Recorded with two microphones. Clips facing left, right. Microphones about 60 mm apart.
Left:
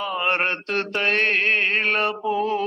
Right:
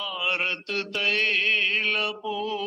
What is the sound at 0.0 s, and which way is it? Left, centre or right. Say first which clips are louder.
Mantra: left 6 dB; left.